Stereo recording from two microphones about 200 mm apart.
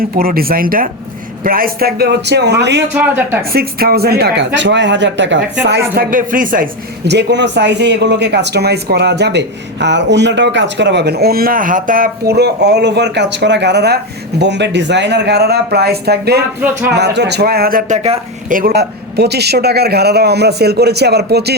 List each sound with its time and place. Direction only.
0.0 s speech: 45° right (ahead or behind)
2.9 s speech: 10° right (ahead or behind)
3.5 s speech: 50° right (ahead or behind)
5.6 s speech: 55° right (ahead or behind)